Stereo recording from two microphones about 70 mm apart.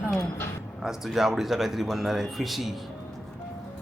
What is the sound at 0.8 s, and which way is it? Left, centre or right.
Speech, centre.